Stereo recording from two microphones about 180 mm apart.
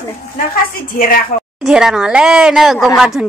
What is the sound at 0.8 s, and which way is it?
Speech, 55° left (ahead or behind).